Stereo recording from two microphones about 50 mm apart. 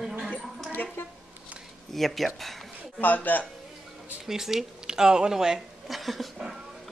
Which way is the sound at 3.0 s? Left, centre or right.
Left.